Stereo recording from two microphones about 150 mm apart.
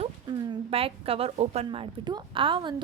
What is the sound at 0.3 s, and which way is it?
A woman's voice, 30° right (ahead or behind).